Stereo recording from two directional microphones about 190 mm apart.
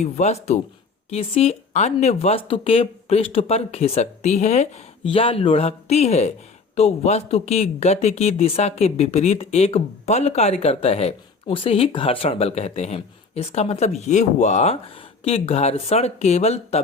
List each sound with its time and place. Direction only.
0.0 s speech: 35° left (ahead or behind)